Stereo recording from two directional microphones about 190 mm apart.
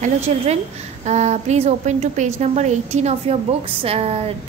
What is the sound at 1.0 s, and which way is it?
A woman's voice, 35° right (ahead or behind).